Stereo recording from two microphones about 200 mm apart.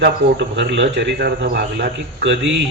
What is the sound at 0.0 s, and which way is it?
Speech, 60° right (ahead or behind).